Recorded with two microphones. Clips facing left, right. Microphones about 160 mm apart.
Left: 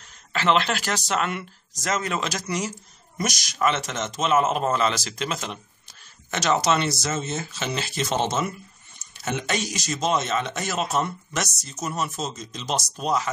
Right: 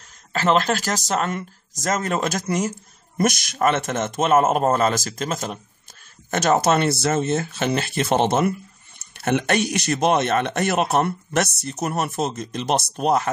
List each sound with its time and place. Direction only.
0.3 s speech: 40° right (ahead or behind)